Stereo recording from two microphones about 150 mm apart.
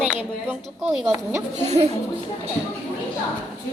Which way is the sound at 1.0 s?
20° right (ahead or behind).